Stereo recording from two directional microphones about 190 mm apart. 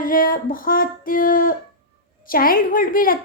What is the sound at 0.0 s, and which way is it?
A woman's voice, 50° left (ahead or behind).